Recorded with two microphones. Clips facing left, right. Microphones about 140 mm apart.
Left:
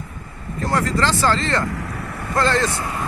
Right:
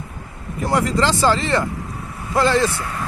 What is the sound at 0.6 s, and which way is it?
Speech, 15° right (ahead or behind).